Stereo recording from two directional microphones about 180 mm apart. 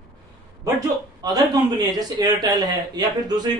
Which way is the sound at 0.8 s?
20° right (ahead or behind).